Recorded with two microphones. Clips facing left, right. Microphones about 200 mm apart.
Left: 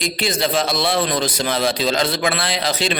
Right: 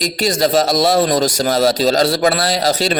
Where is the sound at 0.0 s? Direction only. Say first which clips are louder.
Right 5 dB; 40° right (ahead or behind).